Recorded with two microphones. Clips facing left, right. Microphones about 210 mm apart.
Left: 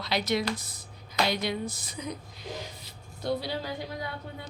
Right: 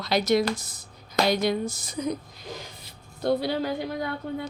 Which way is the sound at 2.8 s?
55° right (ahead or behind).